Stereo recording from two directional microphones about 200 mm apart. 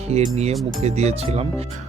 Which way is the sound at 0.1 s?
35° right (ahead or behind).